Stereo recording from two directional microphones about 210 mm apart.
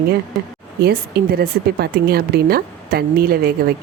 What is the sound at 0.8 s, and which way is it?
Speech, 45° right (ahead or behind).